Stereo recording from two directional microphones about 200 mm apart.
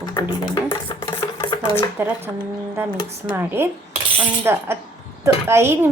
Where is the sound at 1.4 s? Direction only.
25° left (ahead or behind).